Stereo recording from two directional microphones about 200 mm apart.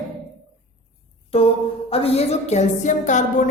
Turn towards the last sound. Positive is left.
turn(degrees=40)  # may be behind; listen again after turning